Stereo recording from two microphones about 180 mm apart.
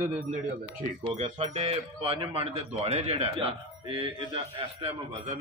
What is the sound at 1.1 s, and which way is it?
Speech, 40° right (ahead or behind).